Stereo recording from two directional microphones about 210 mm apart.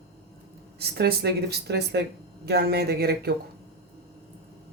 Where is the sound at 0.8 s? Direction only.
50° right (ahead or behind).